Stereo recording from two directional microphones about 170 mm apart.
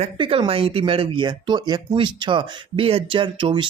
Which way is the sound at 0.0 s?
35° right (ahead or behind).